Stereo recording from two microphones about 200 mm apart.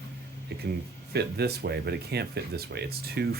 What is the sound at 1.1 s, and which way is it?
Speech, 55° right (ahead or behind).